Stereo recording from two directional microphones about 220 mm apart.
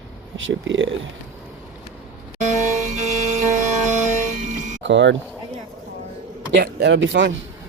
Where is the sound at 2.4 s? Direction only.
30° right (ahead or behind).